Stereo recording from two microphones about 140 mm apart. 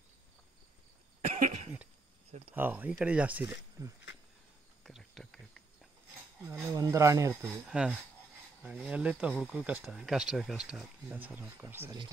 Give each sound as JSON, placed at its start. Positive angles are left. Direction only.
{"t": 1.4, "sound": "cough", "side_deg": -60}
{"t": 2.5, "sound": "speech", "side_deg": -15}
{"t": 3.8, "sound": "speech", "side_deg": -20}
{"t": 4.8, "sound": "a sound", "side_deg": 0}
{"t": 6.7, "sound": "speech", "side_deg": -20}
{"t": 7.4, "sound": "speech", "side_deg": -5}